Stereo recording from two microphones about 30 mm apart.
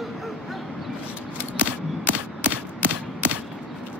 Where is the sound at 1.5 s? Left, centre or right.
Right.